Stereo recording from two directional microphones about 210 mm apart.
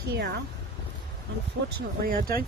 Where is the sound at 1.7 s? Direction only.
45° right (ahead or behind).